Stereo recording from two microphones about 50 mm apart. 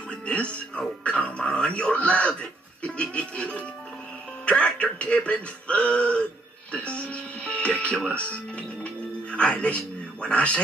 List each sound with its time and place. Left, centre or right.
0.1 s music: left
0.7 s speech: left